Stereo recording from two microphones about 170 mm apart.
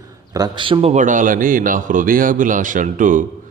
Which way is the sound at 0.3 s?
25° right (ahead or behind).